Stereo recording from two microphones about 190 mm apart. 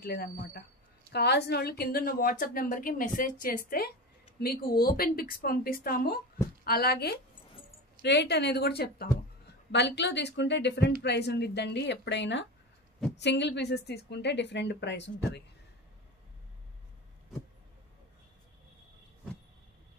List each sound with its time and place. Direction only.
0.0 s a woman's voice: 55° left (ahead or behind)
9.7 s a woman's voice: 65° left (ahead or behind)